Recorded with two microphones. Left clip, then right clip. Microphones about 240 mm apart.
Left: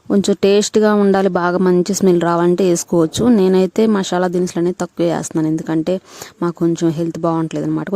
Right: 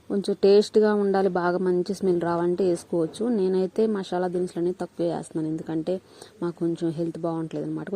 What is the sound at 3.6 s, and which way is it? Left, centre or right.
Speech, left.